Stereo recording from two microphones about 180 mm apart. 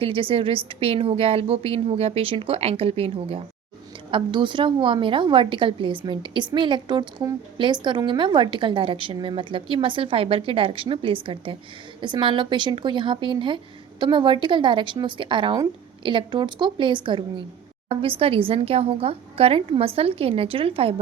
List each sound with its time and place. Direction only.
0.0 s a woman's voice: 30° right (ahead or behind)